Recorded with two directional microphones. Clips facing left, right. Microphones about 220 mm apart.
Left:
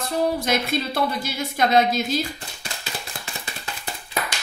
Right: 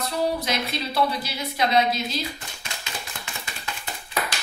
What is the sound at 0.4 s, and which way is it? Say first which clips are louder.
Speech: left 5 dB; 50° left (ahead or behind).